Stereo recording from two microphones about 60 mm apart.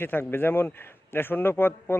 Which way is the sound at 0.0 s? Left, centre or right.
Left.